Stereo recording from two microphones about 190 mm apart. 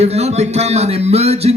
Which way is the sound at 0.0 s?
35° right (ahead or behind).